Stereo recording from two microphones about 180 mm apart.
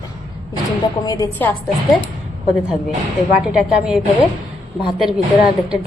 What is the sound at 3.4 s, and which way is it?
A woman's voice, 5° right (ahead or behind).